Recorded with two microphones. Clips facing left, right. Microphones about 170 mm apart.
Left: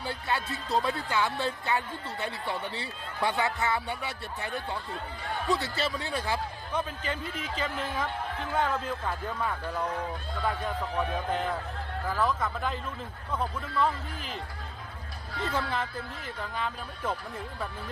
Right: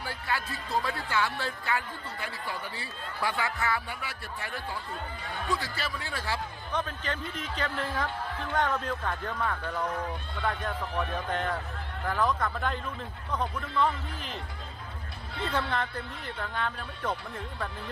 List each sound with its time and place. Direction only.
0.0 s music: 20° left (ahead or behind)
0.8 s a man's voice: 20° left (ahead or behind)
6.7 s speech: 10° left (ahead or behind)
15.7 s speech: 5° left (ahead or behind)